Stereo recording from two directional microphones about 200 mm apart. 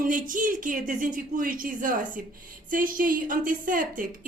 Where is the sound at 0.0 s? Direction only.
40° right (ahead or behind).